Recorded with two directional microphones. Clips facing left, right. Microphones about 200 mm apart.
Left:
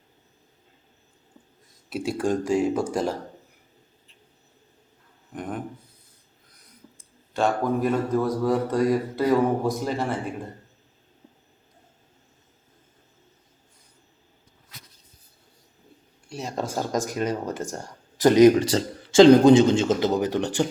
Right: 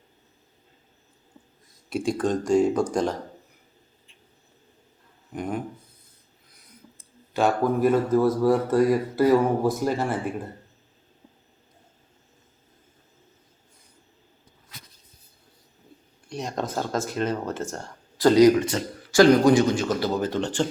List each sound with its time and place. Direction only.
1.9 s speech: 5° left (ahead or behind)
5.3 s a sound: centre (ahead or behind)
7.3 s speech: 5° right (ahead or behind)
16.3 s speech: 5° left (ahead or behind)
18.5 s speech: 35° left (ahead or behind); by 20.7 s 15° left (ahead or behind)